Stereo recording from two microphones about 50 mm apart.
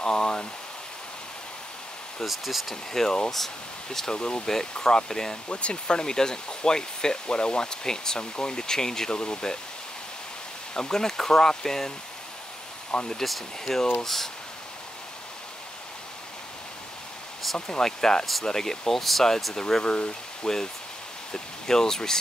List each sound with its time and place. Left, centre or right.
0.0 s speech: centre
2.2 s speech: centre
2.7 s speech: centre
4.1 s speech: centre
10.7 s speech: centre
13.2 s speech: centre
17.6 s speech: centre